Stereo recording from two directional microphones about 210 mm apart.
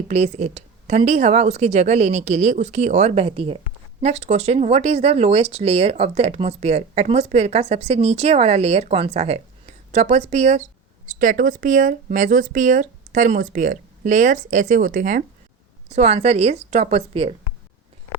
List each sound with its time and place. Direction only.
0.1 s speech: 35° right (ahead or behind)